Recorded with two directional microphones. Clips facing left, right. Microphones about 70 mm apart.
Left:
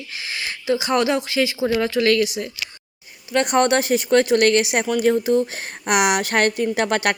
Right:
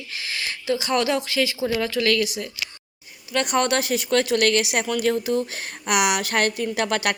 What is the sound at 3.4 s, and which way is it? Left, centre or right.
A woman's voice, left.